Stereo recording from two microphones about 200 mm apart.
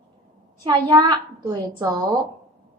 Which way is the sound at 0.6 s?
25° right (ahead or behind).